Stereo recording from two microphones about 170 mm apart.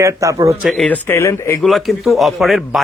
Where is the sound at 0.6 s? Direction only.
5° left (ahead or behind).